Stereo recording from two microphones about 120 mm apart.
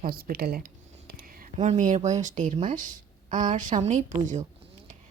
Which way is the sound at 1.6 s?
80° right.